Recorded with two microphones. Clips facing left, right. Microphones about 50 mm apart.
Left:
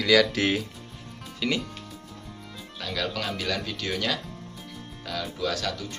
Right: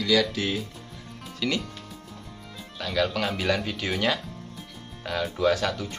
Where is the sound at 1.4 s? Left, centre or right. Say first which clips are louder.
Even; centre.